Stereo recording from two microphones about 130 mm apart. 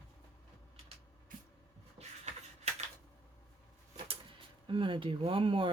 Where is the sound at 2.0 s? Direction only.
60° right (ahead or behind).